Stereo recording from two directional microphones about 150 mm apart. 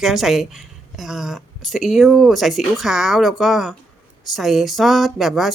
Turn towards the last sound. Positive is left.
turn(degrees=0)  # may be behind; listen again after turning